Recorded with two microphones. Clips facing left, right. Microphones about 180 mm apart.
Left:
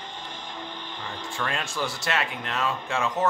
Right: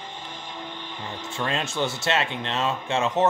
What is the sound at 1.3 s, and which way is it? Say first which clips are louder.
Speech: right 4 dB; 25° right (ahead or behind).